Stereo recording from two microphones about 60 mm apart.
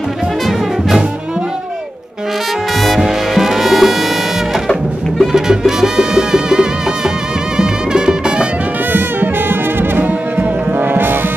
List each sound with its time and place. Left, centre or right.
0.5 s brass instrument: centre
3.0 s music: centre
5.2 s music: centre
8.9 s brass instrument: right
10.8 s music: right